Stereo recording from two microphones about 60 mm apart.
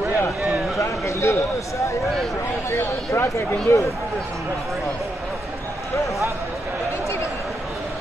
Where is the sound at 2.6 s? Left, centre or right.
Left.